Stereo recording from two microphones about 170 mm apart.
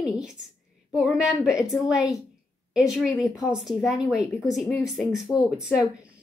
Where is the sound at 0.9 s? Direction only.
5° right (ahead or behind).